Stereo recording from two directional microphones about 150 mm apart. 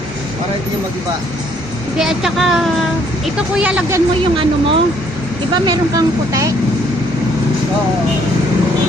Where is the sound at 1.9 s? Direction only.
5° right (ahead or behind).